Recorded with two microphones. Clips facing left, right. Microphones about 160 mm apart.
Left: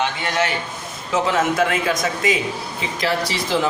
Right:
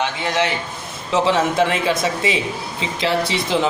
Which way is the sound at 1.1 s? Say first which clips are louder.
Right 2 dB; 25° right (ahead or behind).